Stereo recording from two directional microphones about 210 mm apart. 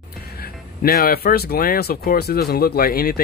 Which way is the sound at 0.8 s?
45° left (ahead or behind).